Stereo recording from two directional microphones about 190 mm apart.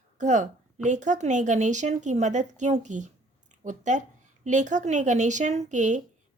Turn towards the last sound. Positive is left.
turn(degrees=-40)  # may be behind; listen again after turning